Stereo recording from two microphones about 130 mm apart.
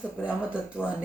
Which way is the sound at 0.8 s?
10° right (ahead or behind).